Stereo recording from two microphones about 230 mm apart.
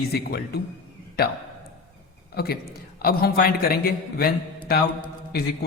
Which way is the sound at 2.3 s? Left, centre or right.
Left.